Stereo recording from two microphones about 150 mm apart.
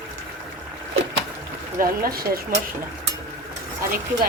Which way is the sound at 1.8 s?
75° right (ahead or behind).